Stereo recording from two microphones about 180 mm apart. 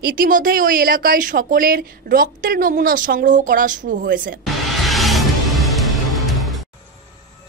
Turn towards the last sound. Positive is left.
turn(degrees=0)  # may be behind; listen again after turning